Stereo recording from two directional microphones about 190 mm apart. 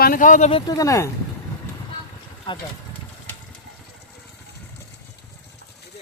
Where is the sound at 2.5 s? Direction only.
25° left (ahead or behind).